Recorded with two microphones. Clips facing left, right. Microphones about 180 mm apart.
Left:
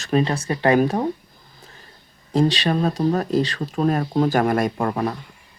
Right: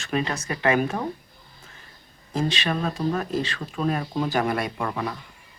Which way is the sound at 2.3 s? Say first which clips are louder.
Left 7 dB; 35° left (ahead or behind).